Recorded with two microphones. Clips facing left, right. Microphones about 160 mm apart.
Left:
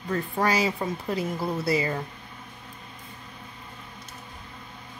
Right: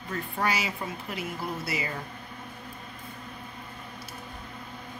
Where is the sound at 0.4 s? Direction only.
40° left (ahead or behind).